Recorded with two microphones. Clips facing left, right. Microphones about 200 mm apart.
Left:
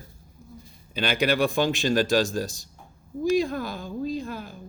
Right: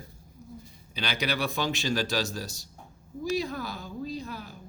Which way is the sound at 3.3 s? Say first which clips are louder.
Left 6 dB; 50° left (ahead or behind).